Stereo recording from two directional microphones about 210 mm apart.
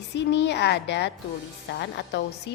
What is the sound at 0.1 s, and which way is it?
A woman's voice, 55° left (ahead or behind).